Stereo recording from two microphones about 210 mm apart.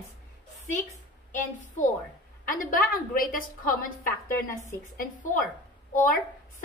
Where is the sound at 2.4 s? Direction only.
40° left (ahead or behind).